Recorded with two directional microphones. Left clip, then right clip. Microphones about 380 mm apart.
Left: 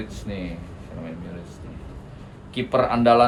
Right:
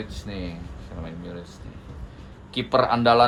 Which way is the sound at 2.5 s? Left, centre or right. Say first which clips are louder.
Even; centre.